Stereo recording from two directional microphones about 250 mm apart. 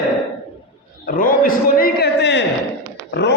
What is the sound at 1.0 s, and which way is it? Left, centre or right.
A man's voice, left.